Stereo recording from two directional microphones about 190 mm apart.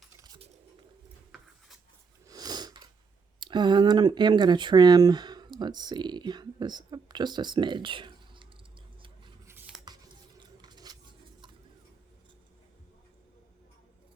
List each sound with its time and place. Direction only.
0.2 s bird: 20° right (ahead or behind)
2.2 s sniff: 20° right (ahead or behind)
3.4 s speech: 25° right (ahead or behind)
10.6 s a sound: 20° right (ahead or behind)